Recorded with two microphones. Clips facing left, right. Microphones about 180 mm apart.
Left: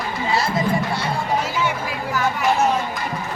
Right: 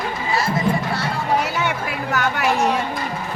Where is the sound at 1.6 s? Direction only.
70° right (ahead or behind).